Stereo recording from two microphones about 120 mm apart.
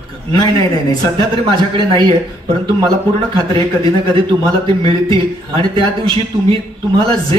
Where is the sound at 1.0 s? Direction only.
45° right (ahead or behind).